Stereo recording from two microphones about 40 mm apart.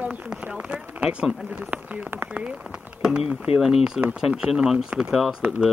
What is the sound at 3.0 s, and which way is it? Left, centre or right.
Speech, centre.